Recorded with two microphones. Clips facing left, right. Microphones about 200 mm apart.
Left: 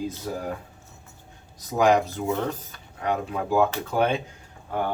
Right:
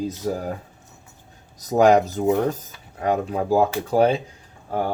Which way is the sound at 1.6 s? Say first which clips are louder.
Right 5 dB; 40° right (ahead or behind).